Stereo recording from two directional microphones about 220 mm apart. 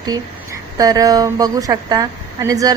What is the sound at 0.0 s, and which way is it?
A woman's voice, 15° right (ahead or behind).